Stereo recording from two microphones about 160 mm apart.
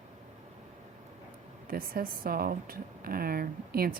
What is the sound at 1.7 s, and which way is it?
A woman's voice, 65° right (ahead or behind).